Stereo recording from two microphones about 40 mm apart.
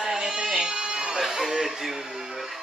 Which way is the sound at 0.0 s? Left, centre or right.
Centre.